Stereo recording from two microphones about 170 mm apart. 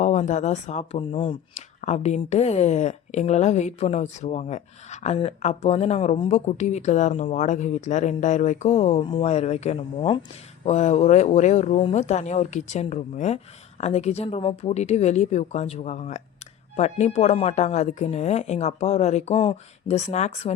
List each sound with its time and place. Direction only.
0.0 s speech: 45° left (ahead or behind)
1.5 s speech: 40° left (ahead or behind)